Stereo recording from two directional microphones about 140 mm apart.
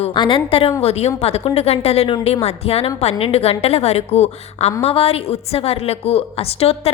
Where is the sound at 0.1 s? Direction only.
35° left (ahead or behind).